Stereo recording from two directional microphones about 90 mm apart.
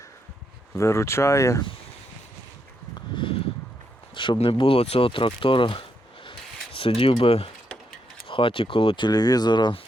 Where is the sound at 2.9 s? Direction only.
65° left (ahead or behind).